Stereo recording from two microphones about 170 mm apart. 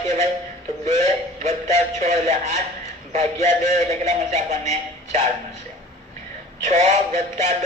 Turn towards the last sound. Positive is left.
turn(degrees=-45)  # may be behind; listen again after turning